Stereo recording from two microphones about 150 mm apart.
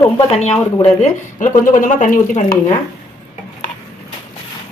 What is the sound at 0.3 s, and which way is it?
Speech, 45° left (ahead or behind).